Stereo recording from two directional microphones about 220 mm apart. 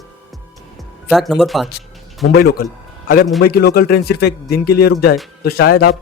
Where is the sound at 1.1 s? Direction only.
Centre (ahead or behind).